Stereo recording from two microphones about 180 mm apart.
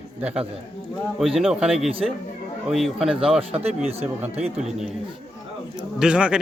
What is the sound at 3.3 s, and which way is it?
Speech, 35° right (ahead or behind).